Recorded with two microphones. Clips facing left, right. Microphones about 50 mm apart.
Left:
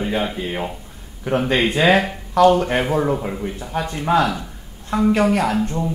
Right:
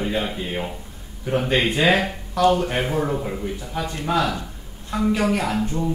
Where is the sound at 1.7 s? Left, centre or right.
Left.